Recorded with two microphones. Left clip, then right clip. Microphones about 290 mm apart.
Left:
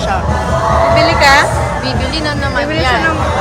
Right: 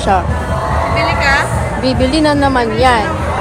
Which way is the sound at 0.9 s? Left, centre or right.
Left.